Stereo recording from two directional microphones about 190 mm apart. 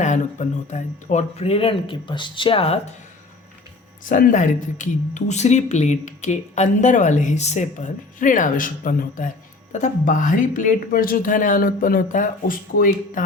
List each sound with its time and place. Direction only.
0.0 s speech: 40° left (ahead or behind)
4.1 s speech: 45° left (ahead or behind)